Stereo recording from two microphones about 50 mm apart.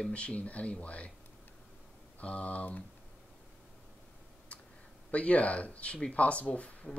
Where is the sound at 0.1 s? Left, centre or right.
Left.